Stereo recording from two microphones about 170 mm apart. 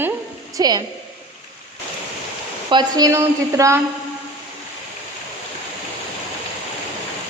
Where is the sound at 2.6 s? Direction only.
25° right (ahead or behind).